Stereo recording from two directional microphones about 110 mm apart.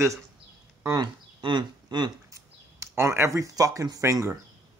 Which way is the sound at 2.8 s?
25° right (ahead or behind).